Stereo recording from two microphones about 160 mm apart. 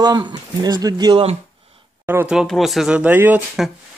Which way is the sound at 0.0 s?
25° right (ahead or behind).